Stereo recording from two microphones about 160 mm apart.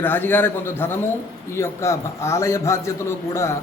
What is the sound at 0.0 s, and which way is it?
A man's voice, 10° left (ahead or behind).